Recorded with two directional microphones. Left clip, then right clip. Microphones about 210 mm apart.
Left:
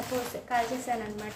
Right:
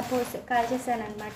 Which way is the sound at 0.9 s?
10° right (ahead or behind).